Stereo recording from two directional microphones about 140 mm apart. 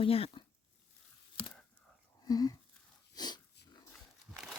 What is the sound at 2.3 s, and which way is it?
Speech, 25° left (ahead or behind).